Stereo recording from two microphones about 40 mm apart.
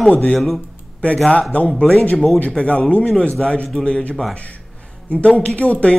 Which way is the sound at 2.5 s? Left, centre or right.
Left.